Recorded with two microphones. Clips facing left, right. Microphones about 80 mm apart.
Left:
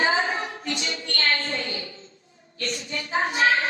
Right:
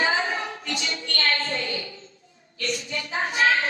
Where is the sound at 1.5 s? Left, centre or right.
Left.